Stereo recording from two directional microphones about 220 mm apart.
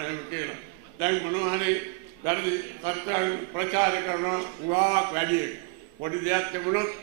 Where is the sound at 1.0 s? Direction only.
15° right (ahead or behind).